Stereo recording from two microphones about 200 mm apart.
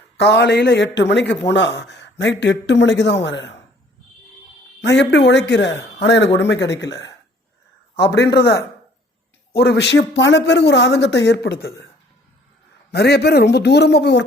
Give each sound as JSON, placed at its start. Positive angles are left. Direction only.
{"t": 0.2, "sound": "a man's voice", "side_deg": 55}
{"t": 4.8, "sound": "a man's voice", "side_deg": 60}
{"t": 12.9, "sound": "a man's voice", "side_deg": 55}